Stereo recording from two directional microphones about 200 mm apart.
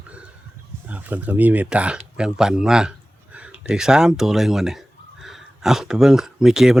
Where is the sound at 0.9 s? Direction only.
10° right (ahead or behind).